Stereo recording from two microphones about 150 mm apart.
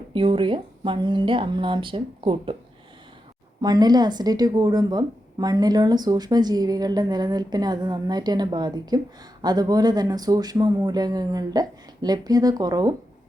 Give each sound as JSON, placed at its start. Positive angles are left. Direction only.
{"t": 0.1, "sound": "a woman's voice", "side_deg": -35}
{"t": 3.6, "sound": "a woman's voice", "side_deg": -25}